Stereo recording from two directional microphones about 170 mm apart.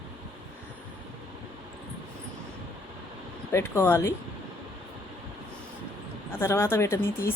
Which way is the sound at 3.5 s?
15° left (ahead or behind).